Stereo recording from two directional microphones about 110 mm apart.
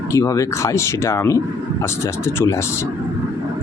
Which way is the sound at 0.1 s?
30° left (ahead or behind).